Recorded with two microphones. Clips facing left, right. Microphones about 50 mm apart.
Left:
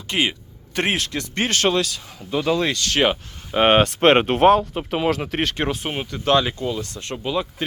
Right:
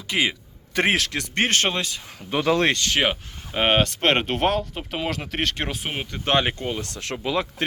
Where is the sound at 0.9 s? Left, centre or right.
Right.